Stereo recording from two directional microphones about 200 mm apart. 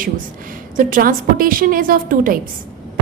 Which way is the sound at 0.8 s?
45° right (ahead or behind).